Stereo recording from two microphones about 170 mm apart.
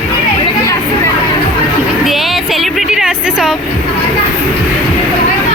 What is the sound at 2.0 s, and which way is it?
Vehicle, centre (ahead or behind).